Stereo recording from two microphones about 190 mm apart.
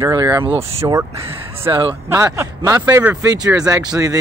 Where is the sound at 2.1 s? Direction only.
15° right (ahead or behind).